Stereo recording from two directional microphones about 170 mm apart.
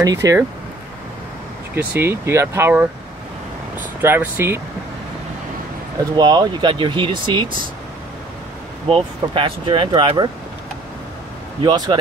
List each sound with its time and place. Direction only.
0.0 s speech: 20° right (ahead or behind)
1.8 s speech: 15° right (ahead or behind)
4.0 s speech: 15° right (ahead or behind)
6.1 s speech: 25° right (ahead or behind)
8.8 s speech: 30° right (ahead or behind)
11.6 s speech: 25° right (ahead or behind)